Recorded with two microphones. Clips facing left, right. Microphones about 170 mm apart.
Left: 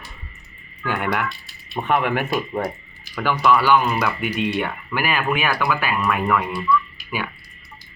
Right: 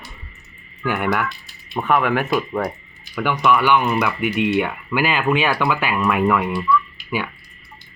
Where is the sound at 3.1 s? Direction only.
15° right (ahead or behind).